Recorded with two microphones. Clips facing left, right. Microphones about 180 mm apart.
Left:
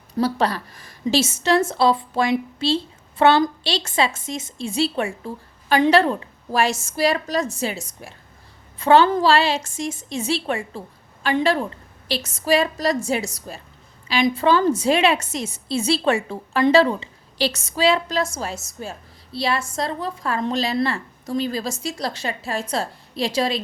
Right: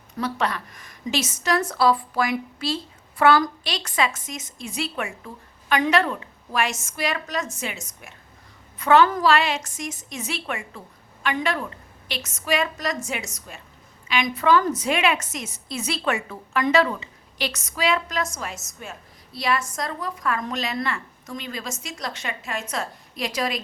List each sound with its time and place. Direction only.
0.2 s a woman's voice: 35° left (ahead or behind)